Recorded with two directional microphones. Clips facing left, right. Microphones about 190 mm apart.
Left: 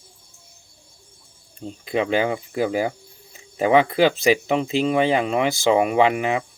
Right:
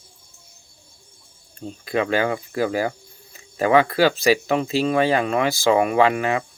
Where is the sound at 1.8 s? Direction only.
20° left (ahead or behind).